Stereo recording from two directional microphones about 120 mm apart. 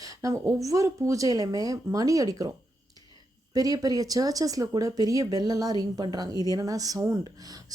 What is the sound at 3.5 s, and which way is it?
Speech, 30° right (ahead or behind).